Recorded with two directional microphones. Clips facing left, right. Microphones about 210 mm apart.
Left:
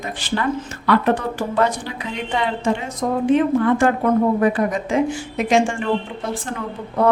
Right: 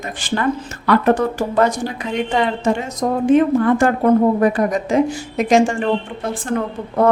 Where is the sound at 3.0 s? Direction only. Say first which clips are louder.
Right 3 dB; 40° right (ahead or behind).